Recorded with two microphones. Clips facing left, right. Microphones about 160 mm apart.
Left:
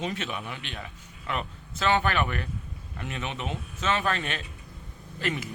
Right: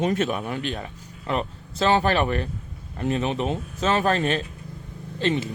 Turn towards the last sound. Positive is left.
turn(degrees=-25)  # may be behind; listen again after turning